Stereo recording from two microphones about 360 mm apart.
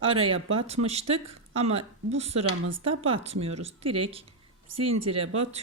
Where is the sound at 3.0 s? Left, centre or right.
Centre.